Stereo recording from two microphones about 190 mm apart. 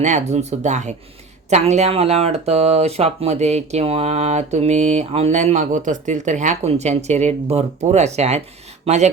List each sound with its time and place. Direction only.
0.0 s speech: 40° right (ahead or behind)